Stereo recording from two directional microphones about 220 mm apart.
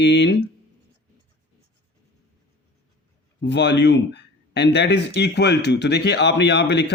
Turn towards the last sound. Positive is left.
turn(degrees=50)  # may be behind; listen again after turning